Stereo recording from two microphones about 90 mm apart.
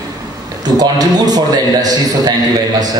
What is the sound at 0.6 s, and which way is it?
A man's voice, 50° right (ahead or behind).